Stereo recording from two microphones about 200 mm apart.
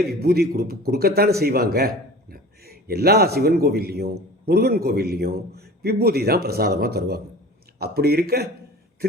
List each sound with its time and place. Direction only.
0.0 s a man's voice: 50° right (ahead or behind)